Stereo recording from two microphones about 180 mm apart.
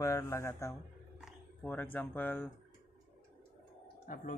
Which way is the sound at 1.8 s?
10° left (ahead or behind).